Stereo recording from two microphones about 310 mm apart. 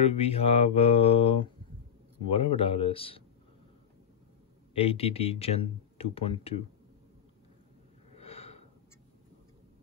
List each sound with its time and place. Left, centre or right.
0.0 s speech: centre
4.7 s speech: centre
8.2 s snort: centre